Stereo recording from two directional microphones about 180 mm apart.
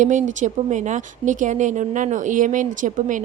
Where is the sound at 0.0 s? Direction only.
45° right (ahead or behind).